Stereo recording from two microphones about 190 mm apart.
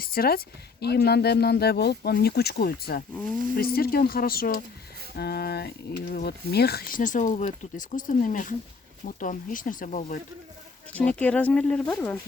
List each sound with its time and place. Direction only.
0.0 s speech: 50° left (ahead or behind)
11.2 s speech: 10° left (ahead or behind)